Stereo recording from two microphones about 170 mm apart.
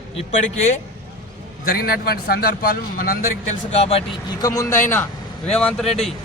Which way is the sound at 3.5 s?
35° left (ahead or behind).